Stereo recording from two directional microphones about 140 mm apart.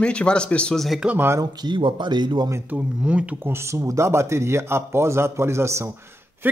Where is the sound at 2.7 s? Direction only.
10° right (ahead or behind).